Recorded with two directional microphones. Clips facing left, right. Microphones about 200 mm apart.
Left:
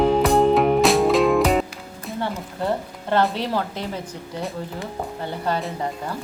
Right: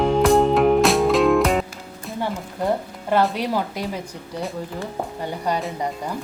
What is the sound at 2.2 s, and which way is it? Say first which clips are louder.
Music: right 2 dB; 10° right (ahead or behind).